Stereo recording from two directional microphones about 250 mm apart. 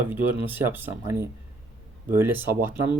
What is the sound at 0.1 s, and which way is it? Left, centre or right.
Speech, centre.